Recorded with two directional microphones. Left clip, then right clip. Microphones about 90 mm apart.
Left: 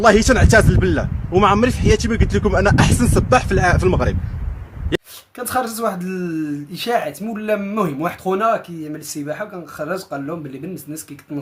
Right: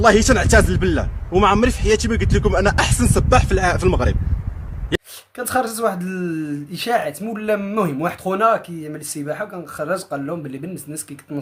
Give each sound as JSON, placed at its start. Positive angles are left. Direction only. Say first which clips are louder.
{"t": 0.0, "sound": "a man's voice", "louder": "left 1 dB", "side_deg": -5}
{"t": 5.4, "sound": "speech", "louder": "right 1 dB", "side_deg": -30}